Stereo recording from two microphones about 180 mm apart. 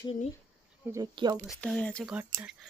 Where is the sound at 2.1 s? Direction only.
5° right (ahead or behind).